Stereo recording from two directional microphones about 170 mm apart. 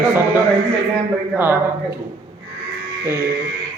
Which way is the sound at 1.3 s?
10° right (ahead or behind).